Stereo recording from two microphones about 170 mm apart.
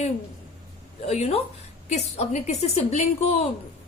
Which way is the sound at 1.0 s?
40° left (ahead or behind).